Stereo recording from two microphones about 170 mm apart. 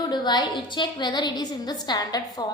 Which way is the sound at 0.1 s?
25° left (ahead or behind).